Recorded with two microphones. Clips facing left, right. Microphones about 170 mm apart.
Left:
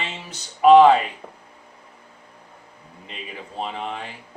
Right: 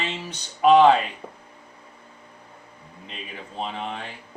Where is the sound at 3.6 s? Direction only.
5° left (ahead or behind).